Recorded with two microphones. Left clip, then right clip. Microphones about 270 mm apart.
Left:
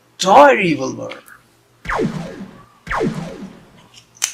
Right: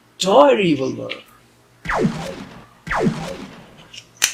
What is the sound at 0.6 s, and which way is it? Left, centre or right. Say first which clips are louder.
Speech: even; left.